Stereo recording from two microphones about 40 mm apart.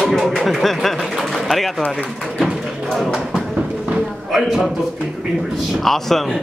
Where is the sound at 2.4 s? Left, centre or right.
Centre.